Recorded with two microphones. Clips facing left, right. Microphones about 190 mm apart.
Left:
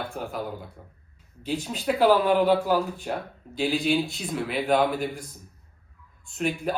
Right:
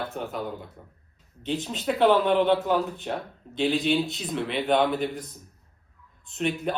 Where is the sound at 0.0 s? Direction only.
Centre (ahead or behind).